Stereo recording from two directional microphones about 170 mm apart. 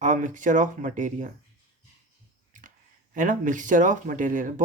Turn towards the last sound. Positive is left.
turn(degrees=-50)  # may be behind; listen again after turning